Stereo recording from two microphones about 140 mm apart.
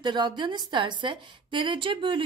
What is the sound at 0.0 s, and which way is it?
A woman's voice, 35° right (ahead or behind).